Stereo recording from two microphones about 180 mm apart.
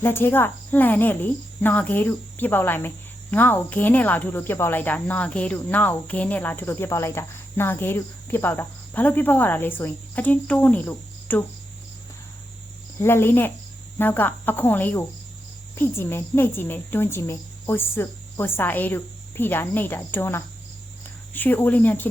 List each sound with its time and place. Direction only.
0.0 s speech: 10° left (ahead or behind)
13.0 s speech: 15° left (ahead or behind)